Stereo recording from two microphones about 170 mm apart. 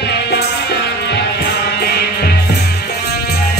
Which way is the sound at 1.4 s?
70° left (ahead or behind).